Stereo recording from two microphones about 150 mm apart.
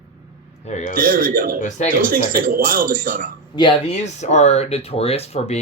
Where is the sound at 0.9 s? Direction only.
70° right (ahead or behind).